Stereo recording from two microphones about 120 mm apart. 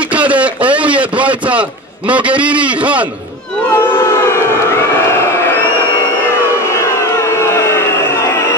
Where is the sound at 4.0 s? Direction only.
20° left (ahead or behind).